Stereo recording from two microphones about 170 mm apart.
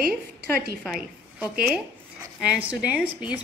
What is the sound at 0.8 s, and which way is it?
A woman's voice, centre (ahead or behind).